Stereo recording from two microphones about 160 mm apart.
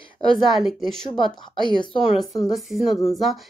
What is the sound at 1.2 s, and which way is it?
Speech, 30° left (ahead or behind).